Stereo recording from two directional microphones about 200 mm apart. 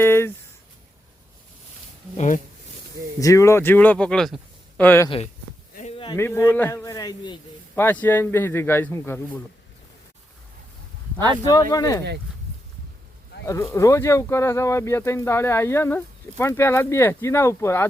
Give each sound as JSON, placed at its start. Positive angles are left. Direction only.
{"t": 0.0, "sound": "speech", "side_deg": 10}
{"t": 2.1, "sound": "speech", "side_deg": 40}
{"t": 3.2, "sound": "speech", "side_deg": 15}
{"t": 5.0, "sound": "speech", "side_deg": 30}
{"t": 6.1, "sound": "speech", "side_deg": 15}
{"t": 7.8, "sound": "speech", "side_deg": 10}
{"t": 11.7, "sound": "speech", "side_deg": 15}
{"t": 13.4, "sound": "speech", "side_deg": 15}